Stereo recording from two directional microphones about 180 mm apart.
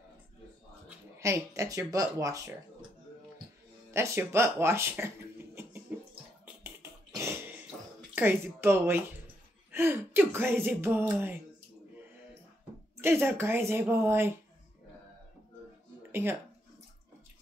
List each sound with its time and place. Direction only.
0.8 s speech: 15° right (ahead or behind)
3.9 s speech: 15° right (ahead or behind)
6.4 s a sound: 15° right (ahead or behind)
8.1 s speech: 10° right (ahead or behind)
13.0 s speech: 10° right (ahead or behind)
16.0 s a sound: 10° right (ahead or behind)